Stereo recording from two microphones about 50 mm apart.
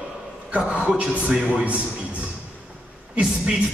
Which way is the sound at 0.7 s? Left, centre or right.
Right.